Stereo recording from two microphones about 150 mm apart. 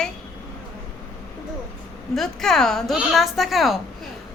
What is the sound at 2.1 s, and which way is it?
A woman's voice, centre (ahead or behind).